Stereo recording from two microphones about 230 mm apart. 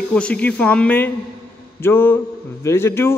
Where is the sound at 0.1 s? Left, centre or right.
Centre.